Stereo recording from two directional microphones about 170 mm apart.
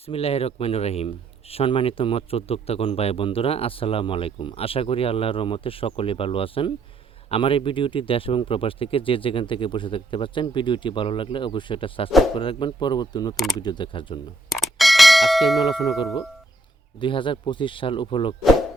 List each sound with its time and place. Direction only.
0.0 s speech: 35° left (ahead or behind)
14.5 s bell: centre (ahead or behind)
17.0 s speech: 30° left (ahead or behind)